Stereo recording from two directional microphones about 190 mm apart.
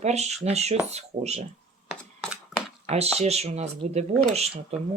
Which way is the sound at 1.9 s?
Centre (ahead or behind).